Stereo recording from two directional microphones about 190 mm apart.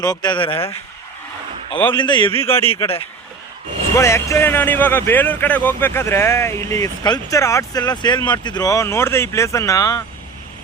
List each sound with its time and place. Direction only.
0.0 s speech: 20° left (ahead or behind)
1.9 s speech: 25° left (ahead or behind)
2.4 s speech: 10° left (ahead or behind)
3.9 s speech: 15° left (ahead or behind)